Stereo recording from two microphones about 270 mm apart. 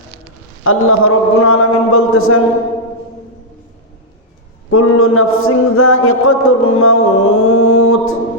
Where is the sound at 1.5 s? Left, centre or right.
Left.